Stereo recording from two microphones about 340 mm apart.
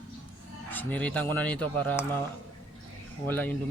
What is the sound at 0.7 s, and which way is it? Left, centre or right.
A man's voice, centre.